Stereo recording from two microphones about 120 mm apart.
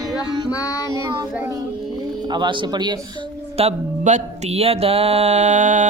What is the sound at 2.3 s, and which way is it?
Speech, 40° right (ahead or behind).